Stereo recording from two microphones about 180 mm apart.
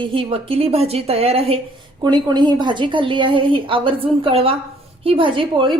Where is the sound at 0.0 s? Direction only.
30° right (ahead or behind).